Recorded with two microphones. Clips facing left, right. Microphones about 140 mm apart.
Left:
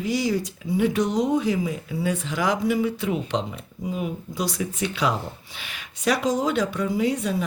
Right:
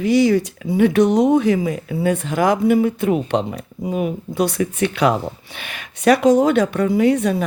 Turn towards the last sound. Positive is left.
turn(degrees=-65)  # may be behind; listen again after turning